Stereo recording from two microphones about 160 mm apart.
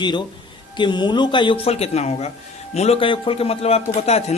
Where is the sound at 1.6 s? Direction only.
40° left (ahead or behind).